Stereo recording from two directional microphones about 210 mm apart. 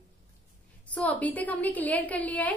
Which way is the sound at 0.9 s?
5° left (ahead or behind).